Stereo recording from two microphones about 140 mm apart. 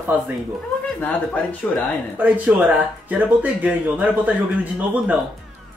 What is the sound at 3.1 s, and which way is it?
Speech, 10° right (ahead or behind).